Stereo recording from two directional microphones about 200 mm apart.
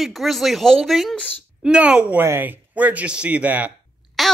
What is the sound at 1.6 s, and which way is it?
Speech, 5° right (ahead or behind).